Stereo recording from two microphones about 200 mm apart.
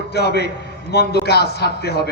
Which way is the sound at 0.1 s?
55° left (ahead or behind).